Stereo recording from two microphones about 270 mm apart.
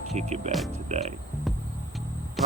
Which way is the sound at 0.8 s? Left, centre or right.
Right.